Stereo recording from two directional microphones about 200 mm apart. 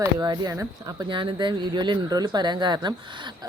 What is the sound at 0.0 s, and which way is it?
Speech, 20° right (ahead or behind).